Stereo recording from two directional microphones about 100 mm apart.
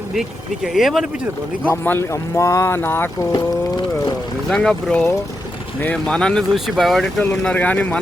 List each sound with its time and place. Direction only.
0.1 s speech: 5° right (ahead or behind)
1.7 s speech: 25° left (ahead or behind)
4.4 s speech: 5° left (ahead or behind)
7.4 s speech: 15° left (ahead or behind)